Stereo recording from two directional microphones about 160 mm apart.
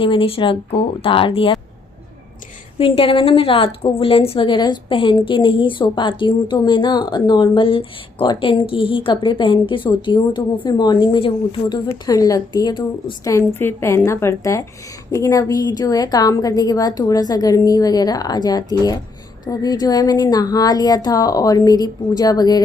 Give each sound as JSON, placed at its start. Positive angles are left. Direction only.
{"t": 0.0, "sound": "a woman's voice", "side_deg": 35}
{"t": 2.7, "sound": "a woman's voice", "side_deg": 35}